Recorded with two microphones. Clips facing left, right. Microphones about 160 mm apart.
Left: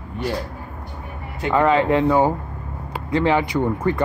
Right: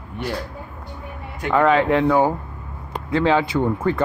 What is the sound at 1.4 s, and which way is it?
Speech, 20° left (ahead or behind).